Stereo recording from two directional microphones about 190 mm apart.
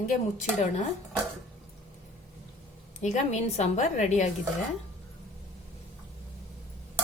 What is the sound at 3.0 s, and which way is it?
A woman's voice, 35° left (ahead or behind).